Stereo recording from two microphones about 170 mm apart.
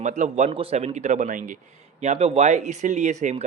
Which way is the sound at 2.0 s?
40° right (ahead or behind).